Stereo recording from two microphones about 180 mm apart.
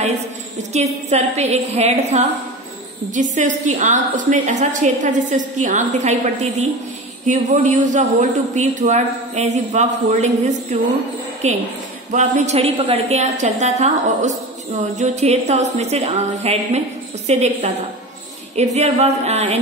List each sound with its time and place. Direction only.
0.7 s a man's voice: 40° right (ahead or behind)